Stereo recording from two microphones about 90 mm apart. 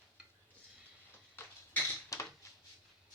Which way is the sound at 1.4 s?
25° left (ahead or behind).